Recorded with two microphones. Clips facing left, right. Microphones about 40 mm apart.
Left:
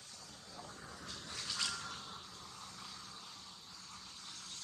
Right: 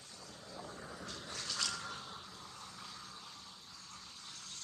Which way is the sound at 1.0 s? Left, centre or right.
Centre.